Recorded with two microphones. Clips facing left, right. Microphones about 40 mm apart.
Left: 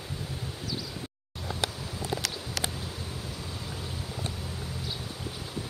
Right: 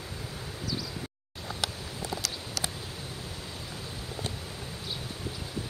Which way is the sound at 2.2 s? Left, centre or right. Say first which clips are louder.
Left 2 dB; left.